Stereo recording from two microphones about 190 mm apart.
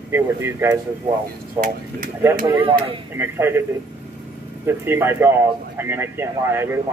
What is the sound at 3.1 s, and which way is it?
Speech, 10° right (ahead or behind).